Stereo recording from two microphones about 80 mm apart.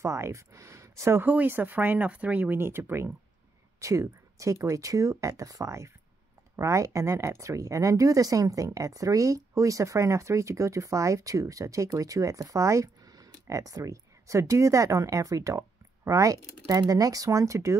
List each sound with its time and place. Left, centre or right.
0.0 s speech: right
1.2 s speech: right
2.5 s speech: right
3.8 s speech: right